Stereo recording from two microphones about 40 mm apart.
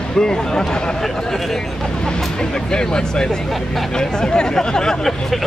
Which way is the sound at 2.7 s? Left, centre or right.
Centre.